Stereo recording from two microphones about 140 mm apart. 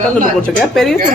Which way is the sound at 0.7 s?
Centre (ahead or behind).